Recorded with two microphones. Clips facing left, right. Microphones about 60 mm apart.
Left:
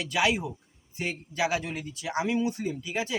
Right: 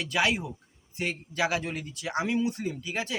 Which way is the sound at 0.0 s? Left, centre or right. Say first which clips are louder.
Left 1 dB; centre.